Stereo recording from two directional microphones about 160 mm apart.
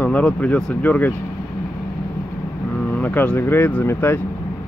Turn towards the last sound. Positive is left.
turn(degrees=15)  # may be behind; listen again after turning